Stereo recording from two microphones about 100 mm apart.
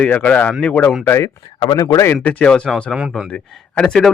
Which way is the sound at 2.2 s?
10° left (ahead or behind).